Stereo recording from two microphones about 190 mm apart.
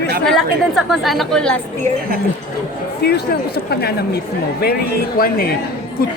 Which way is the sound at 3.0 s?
60° left (ahead or behind).